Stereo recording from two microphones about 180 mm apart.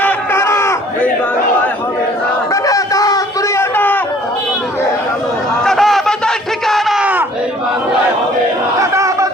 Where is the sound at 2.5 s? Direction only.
20° left (ahead or behind).